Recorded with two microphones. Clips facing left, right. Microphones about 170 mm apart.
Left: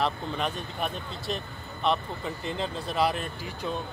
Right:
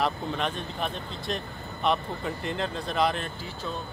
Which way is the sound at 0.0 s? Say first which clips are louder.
Right 1 dB; 5° left (ahead or behind).